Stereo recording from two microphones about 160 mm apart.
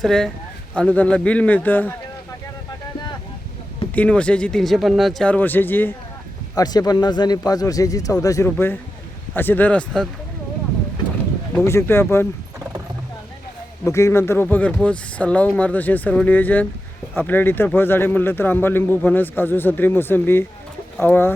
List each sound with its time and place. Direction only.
0.0 s speech: 5° left (ahead or behind)
3.9 s speech: 10° left (ahead or behind)
6.6 s a man's voice: 25° left (ahead or behind); by 10.1 s 5° left (ahead or behind)
11.6 s speech: 15° left (ahead or behind)
13.8 s speech: 20° left (ahead or behind)